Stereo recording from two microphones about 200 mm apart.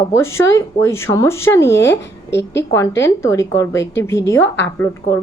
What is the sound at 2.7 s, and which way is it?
A woman's voice, 15° left (ahead or behind).